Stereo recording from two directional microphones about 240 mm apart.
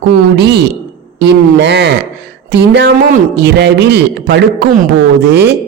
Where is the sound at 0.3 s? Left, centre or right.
Right.